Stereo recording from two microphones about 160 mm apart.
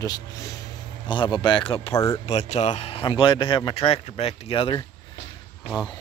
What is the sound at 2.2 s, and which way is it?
Speech, 45° left (ahead or behind).